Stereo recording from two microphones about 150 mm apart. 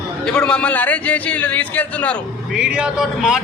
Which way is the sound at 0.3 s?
5° left (ahead or behind).